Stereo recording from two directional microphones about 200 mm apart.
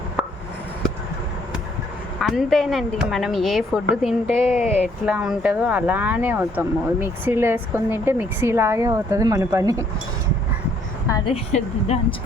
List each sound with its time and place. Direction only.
0.2 s chop: 5° right (ahead or behind)
2.2 s speech: centre (ahead or behind); by 9.8 s 15° right (ahead or behind)
11.3 s a woman's voice: 30° left (ahead or behind)